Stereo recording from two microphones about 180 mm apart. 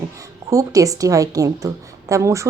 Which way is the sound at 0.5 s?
20° right (ahead or behind).